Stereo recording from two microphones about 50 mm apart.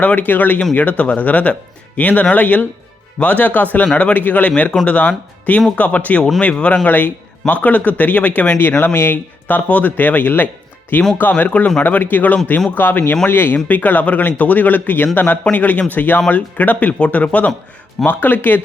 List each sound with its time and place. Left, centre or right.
0.0 s speech: left